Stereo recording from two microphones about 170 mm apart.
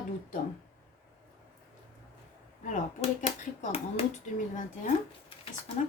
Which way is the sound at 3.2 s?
40° left (ahead or behind).